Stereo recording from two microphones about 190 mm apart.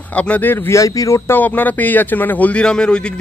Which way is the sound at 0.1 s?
5° left (ahead or behind).